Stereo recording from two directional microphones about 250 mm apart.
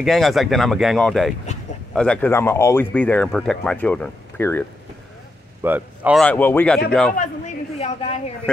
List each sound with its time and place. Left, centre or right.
0.0 s speech: centre
5.6 s speech: centre
7.2 s a sound: left